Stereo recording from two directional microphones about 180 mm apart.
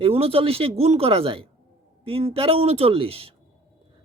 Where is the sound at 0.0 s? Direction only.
30° right (ahead or behind).